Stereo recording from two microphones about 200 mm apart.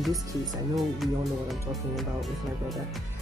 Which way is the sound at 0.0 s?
Centre (ahead or behind).